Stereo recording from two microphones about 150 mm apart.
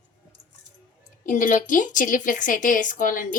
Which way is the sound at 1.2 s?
60° left (ahead or behind).